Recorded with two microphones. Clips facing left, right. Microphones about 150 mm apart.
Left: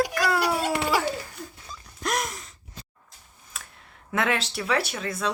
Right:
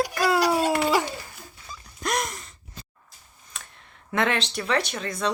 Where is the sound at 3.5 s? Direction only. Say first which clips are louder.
Even; 5° left (ahead or behind).